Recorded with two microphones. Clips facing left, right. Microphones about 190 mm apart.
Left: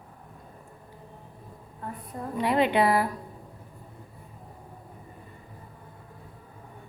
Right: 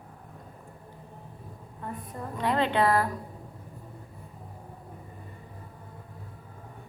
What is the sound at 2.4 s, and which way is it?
Speech, 15° left (ahead or behind).